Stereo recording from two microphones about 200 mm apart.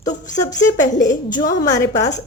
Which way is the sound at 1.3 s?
20° left (ahead or behind).